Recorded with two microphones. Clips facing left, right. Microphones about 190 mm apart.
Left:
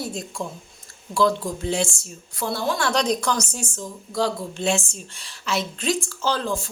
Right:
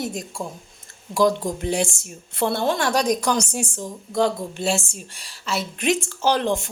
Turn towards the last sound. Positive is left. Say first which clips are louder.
# right 4 dB
turn(degrees=-20)  # may be behind; listen again after turning